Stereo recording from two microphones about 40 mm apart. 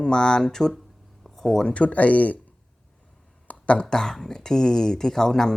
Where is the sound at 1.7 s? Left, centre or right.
Left.